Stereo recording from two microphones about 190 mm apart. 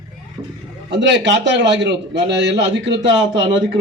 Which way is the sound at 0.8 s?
65° right (ahead or behind).